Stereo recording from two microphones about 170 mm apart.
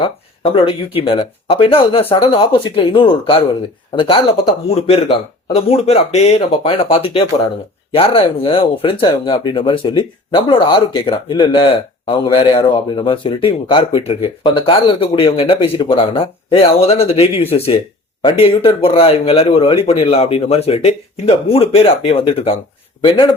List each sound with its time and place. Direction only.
0.0 s speech: 35° left (ahead or behind)